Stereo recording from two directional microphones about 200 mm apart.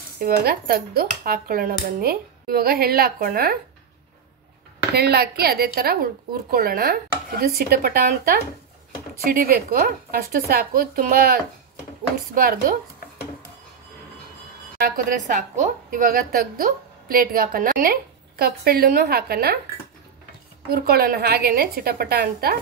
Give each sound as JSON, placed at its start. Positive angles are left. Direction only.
{"t": 0.2, "sound": "a woman's voice", "side_deg": -50}
{"t": 4.9, "sound": "a woman's voice", "side_deg": -50}
{"t": 14.8, "sound": "a woman's voice", "side_deg": -45}
{"t": 20.7, "sound": "a woman's voice", "side_deg": -50}